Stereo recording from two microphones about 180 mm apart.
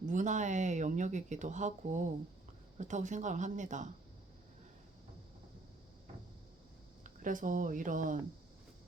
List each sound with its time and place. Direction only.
0.0 s speech: 40° right (ahead or behind)
7.0 s speech: 45° right (ahead or behind)